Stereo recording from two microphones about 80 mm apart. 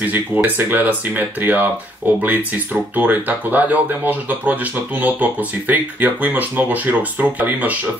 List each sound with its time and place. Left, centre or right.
0.0 s speech: right